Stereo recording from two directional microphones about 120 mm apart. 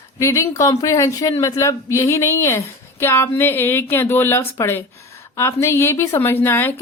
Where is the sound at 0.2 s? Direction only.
25° left (ahead or behind).